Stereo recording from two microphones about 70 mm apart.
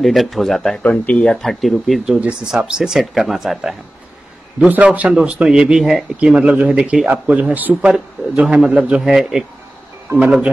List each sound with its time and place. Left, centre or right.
0.0 s speech: centre
0.8 s speech: centre
1.2 s speech: centre
2.1 s speech: centre
4.6 s speech: right; by 6.0 s centre
6.1 s speech: centre
8.4 s speech: centre